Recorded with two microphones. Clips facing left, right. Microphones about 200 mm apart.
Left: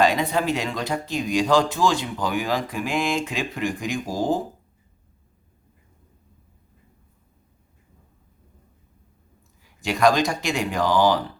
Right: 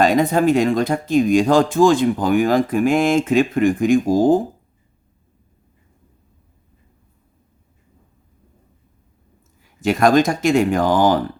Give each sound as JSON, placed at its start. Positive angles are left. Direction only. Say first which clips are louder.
{"t": 0.0, "sound": "speech", "louder": "right 6 dB", "side_deg": -45}
{"t": 9.8, "sound": "speech", "louder": "right 5 dB", "side_deg": -50}